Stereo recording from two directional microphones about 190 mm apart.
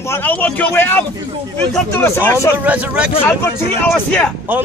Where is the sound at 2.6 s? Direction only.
5° right (ahead or behind).